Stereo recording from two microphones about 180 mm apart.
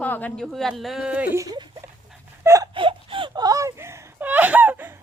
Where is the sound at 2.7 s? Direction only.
30° right (ahead or behind); by 5.0 s 10° right (ahead or behind).